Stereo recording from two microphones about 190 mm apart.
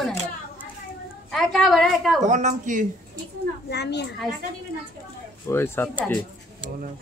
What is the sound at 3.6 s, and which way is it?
Speech, 60° left (ahead or behind).